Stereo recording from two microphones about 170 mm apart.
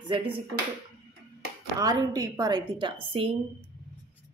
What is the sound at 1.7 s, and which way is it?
Speech, 20° right (ahead or behind).